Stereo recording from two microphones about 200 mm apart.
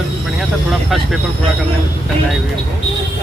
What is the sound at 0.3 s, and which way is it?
Speech, centre (ahead or behind).